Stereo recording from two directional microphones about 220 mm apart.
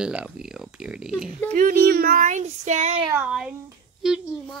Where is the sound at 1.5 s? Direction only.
40° right (ahead or behind).